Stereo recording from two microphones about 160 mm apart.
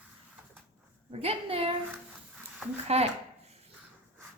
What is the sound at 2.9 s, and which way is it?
Speech, 40° right (ahead or behind).